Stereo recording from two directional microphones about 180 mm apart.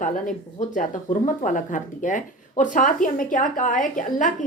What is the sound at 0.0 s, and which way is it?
Speech, 45° left (ahead or behind).